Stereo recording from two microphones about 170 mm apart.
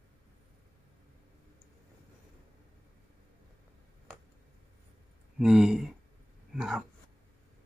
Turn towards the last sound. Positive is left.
turn(degrees=-5)  # may be behind; listen again after turning